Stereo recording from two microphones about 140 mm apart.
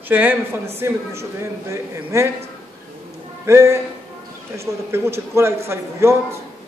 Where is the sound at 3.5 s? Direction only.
20° right (ahead or behind).